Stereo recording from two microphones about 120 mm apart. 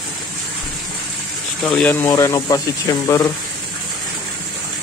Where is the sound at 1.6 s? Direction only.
10° left (ahead or behind).